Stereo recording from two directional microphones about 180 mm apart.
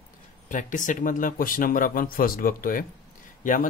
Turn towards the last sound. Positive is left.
turn(degrees=50)  # may be behind; listen again after turning